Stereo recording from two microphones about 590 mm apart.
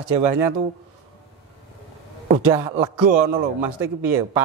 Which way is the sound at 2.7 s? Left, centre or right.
Right.